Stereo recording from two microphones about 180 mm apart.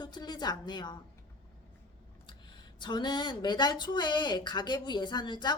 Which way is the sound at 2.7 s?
25° left (ahead or behind).